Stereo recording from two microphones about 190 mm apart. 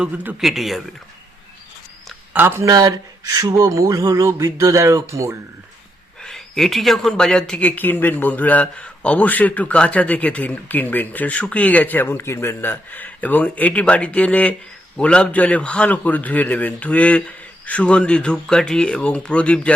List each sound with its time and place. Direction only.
0.0 s a man's voice: 5° right (ahead or behind)
2.0 s speech: 10° right (ahead or behind)
6.2 s speech: centre (ahead or behind)